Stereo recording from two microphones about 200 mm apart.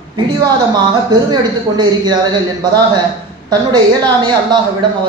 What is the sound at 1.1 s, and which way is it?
A man's voice, 20° right (ahead or behind).